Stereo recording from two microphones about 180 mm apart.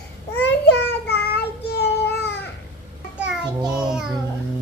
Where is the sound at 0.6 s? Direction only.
65° left (ahead or behind).